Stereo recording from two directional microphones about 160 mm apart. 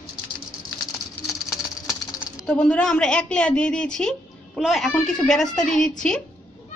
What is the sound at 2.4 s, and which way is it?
A woman's voice, 5° left (ahead or behind).